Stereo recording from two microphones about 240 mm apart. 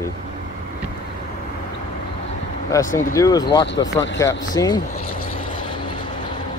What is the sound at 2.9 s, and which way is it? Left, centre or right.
Speech, left.